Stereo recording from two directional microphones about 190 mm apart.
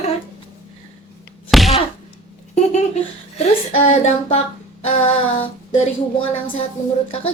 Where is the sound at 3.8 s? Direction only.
35° left (ahead or behind).